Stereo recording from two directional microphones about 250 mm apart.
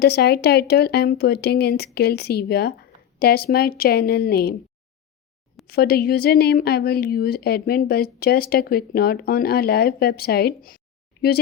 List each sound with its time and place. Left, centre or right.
0.0 s speech: left
5.6 s speech: left